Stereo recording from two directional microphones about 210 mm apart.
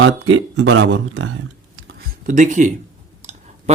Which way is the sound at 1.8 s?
45° right (ahead or behind).